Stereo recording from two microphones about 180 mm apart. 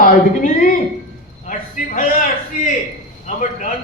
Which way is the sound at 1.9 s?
45° left (ahead or behind).